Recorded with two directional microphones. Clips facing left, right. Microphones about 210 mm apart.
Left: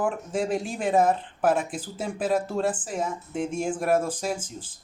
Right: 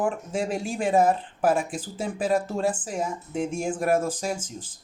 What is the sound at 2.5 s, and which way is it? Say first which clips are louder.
Speech: even; 10° right (ahead or behind).